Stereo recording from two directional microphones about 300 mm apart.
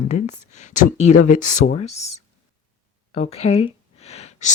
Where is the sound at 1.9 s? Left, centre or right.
Left.